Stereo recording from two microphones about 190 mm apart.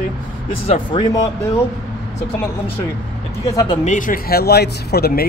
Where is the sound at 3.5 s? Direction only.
25° left (ahead or behind).